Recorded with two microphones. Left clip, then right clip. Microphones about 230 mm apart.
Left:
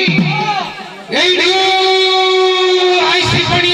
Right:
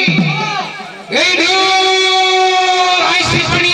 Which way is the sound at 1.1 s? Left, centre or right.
Right.